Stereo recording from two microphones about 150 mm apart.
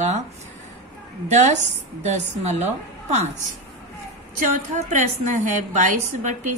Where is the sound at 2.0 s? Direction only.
50° right (ahead or behind).